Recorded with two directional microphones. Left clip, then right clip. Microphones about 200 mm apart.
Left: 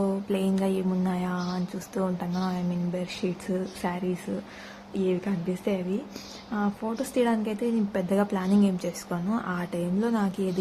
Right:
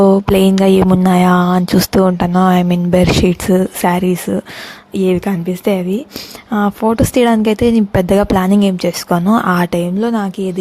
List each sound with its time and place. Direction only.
0.0 s speech: 55° right (ahead or behind)